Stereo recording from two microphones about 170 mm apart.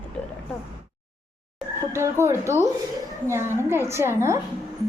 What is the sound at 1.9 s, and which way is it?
A woman's voice, 15° right (ahead or behind).